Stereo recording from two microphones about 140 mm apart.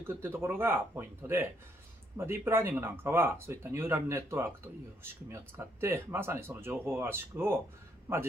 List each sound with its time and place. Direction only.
0.0 s speech: 15° right (ahead or behind)